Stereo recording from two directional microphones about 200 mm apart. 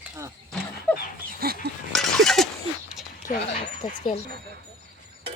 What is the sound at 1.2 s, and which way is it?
Dog, 50° right (ahead or behind).